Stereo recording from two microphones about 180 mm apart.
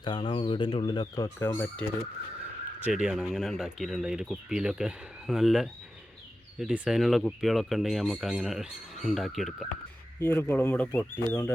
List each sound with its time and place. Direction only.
0.0 s speech: 25° left (ahead or behind); by 1.8 s 10° left (ahead or behind)
2.8 s speech: 5° right (ahead or behind)
10.2 s speech: 10° left (ahead or behind)